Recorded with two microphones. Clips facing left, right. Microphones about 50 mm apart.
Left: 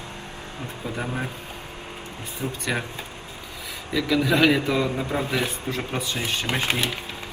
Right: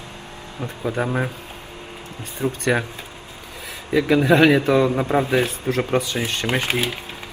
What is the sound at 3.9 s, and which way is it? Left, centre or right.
A man's voice, right.